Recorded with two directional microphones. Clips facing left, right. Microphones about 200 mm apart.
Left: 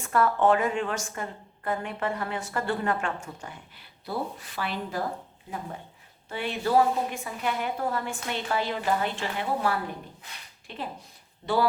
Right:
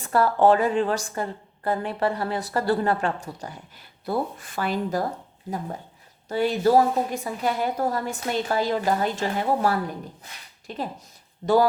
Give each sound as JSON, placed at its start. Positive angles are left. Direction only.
{"t": 0.0, "sound": "a woman's voice", "side_deg": -35}
{"t": 6.2, "sound": "a woman's voice", "side_deg": -40}